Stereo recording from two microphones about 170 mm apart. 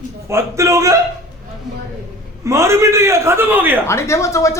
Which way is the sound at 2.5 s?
15° right (ahead or behind).